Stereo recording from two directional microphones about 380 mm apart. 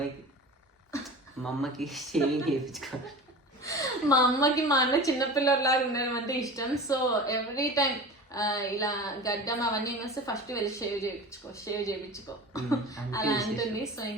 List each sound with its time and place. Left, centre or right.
1.7 s a woman's voice: centre